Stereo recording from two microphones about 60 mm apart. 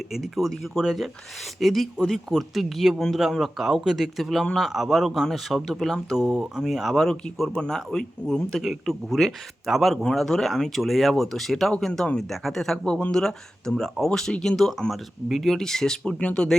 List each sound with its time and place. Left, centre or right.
0.1 s speech: centre
7.5 s speech: centre